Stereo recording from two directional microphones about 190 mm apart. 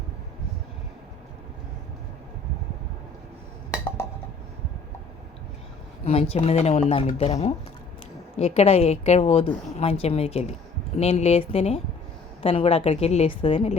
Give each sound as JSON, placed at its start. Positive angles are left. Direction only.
{"t": 6.1, "sound": "a woman's voice", "side_deg": 30}